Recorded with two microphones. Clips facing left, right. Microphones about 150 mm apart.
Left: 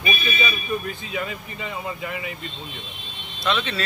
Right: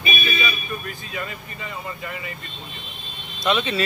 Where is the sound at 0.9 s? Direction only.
20° left (ahead or behind).